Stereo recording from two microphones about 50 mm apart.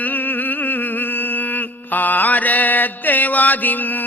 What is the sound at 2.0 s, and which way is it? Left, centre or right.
Mantra, left.